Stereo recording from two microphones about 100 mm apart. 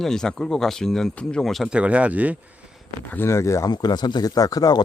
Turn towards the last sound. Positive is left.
turn(degrees=40)  # may be behind; listen again after turning